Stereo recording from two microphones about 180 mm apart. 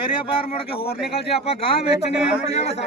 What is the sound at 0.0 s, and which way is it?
A man's voice, 30° left (ahead or behind).